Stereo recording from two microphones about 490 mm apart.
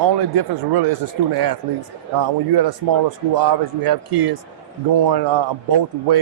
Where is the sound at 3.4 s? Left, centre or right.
Right.